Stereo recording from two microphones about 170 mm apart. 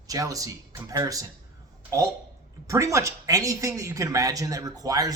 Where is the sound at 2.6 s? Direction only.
20° right (ahead or behind).